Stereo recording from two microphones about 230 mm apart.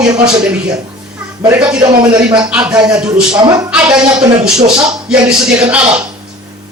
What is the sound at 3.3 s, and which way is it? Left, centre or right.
Speech, centre.